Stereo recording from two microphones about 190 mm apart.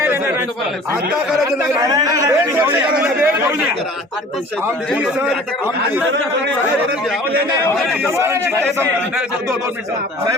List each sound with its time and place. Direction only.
1.5 s a man's voice: 20° right (ahead or behind)
4.9 s a man's voice: centre (ahead or behind)
7.7 s a man's voice: 5° left (ahead or behind)
8.0 s a man's voice: 10° right (ahead or behind)